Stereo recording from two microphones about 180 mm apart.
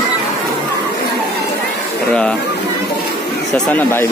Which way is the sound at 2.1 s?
5° left (ahead or behind).